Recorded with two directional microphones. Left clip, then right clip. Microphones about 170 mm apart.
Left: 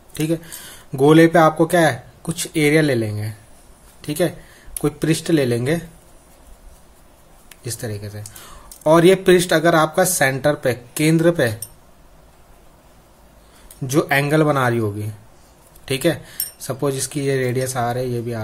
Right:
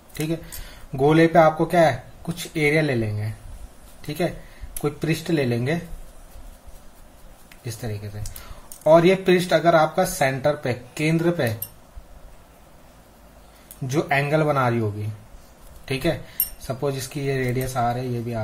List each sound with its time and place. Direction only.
0.1 s speech: 35° left (ahead or behind)
7.6 s speech: 35° left (ahead or behind)
13.8 s speech: 35° left (ahead or behind)